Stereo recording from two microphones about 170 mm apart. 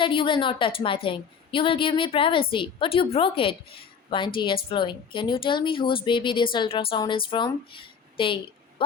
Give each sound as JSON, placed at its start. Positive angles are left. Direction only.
{"t": 0.0, "sound": "a woman's voice", "side_deg": 30}